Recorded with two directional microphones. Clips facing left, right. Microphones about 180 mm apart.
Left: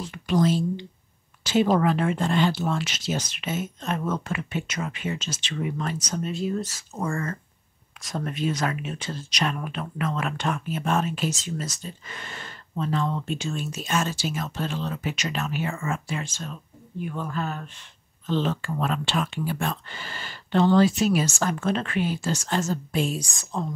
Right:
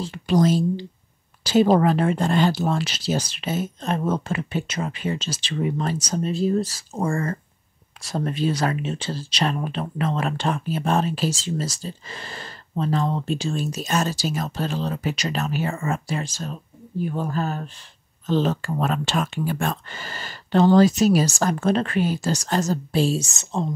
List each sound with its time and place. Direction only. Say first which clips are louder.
0.0 s speech: right 3 dB; 35° right (ahead or behind)